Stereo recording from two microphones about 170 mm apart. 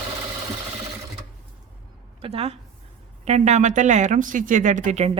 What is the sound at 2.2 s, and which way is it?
A woman's voice, 35° right (ahead or behind).